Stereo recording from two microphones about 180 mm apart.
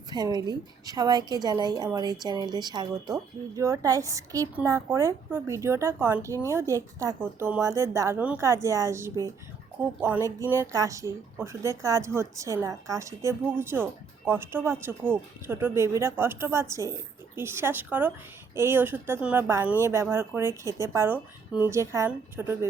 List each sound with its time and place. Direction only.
0.1 s a woman's voice: 20° right (ahead or behind)